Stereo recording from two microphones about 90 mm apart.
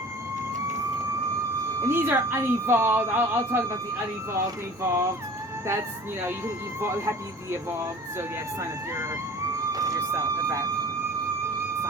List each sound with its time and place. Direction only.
1.8 s a woman's voice: 25° right (ahead or behind)
6.8 s a woman's voice: 30° right (ahead or behind)
9.7 s speech: 40° right (ahead or behind)